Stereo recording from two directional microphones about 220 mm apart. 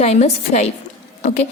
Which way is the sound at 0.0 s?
30° left (ahead or behind).